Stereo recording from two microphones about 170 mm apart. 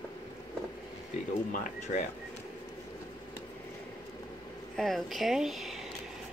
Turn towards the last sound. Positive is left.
turn(degrees=0)  # may be behind; listen again after turning